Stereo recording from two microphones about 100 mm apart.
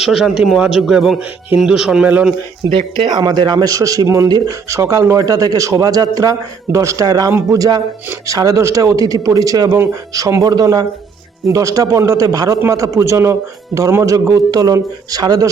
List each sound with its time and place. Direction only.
0.0 s a man's voice: centre (ahead or behind)
2.6 s speech: 65° right (ahead or behind)
3.1 s speech: 45° right (ahead or behind)